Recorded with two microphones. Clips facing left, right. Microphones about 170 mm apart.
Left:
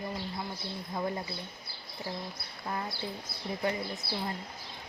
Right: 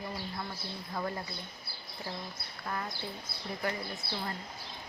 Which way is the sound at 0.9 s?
20° left (ahead or behind).